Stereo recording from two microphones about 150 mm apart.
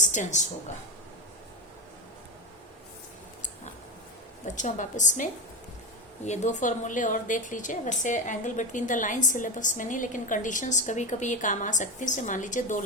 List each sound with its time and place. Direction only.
0.0 s speech: 55° left (ahead or behind)
4.4 s a woman's voice: 55° left (ahead or behind)